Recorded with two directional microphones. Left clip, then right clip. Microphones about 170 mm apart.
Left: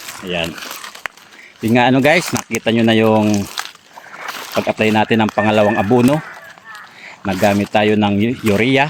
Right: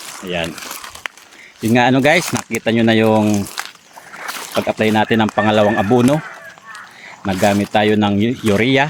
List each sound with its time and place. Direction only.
0.4 s crumpling: 25° left (ahead or behind)
1.6 s speech: 5° left (ahead or behind)
2.6 s speech: 5° left (ahead or behind)
3.2 s speech: 25° left (ahead or behind)
4.2 s speech: 15° left (ahead or behind)
7.2 s speech: 15° left (ahead or behind)